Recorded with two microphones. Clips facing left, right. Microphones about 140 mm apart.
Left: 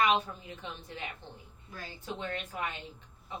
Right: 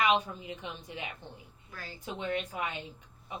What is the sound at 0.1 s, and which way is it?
A woman's voice, 15° right (ahead or behind).